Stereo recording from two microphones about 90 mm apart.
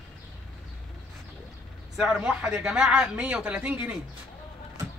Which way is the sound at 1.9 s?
5° right (ahead or behind).